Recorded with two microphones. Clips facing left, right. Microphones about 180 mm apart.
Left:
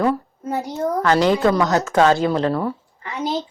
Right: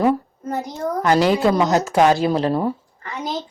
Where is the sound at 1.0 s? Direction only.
15° right (ahead or behind).